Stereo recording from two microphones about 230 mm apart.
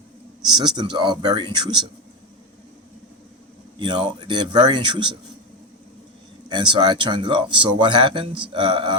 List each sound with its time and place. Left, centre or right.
0.5 s a man's voice: centre
3.8 s a man's voice: centre
6.5 s a man's voice: centre